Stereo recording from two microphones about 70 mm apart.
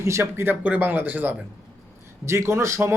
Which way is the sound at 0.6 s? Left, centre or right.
Right.